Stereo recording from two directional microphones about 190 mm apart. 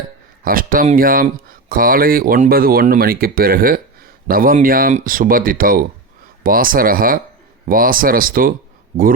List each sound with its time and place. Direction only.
0.4 s speech: 50° right (ahead or behind)